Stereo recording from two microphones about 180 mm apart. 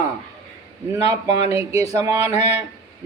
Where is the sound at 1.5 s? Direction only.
15° right (ahead or behind).